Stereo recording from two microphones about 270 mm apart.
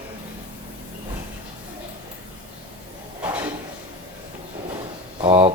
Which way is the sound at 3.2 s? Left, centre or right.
Centre.